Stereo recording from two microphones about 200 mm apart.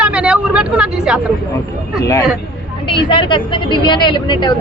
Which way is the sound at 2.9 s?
25° left (ahead or behind).